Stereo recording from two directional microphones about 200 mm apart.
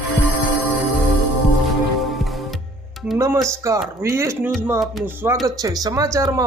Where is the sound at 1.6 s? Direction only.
Centre (ahead or behind).